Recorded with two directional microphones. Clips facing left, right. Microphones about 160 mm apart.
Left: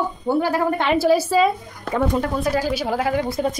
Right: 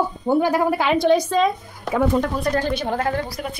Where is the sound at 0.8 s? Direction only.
Centre (ahead or behind).